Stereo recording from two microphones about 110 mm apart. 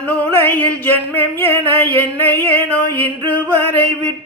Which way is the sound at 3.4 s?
15° left (ahead or behind).